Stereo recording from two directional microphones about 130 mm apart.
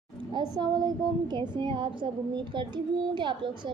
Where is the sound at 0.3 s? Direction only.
35° right (ahead or behind).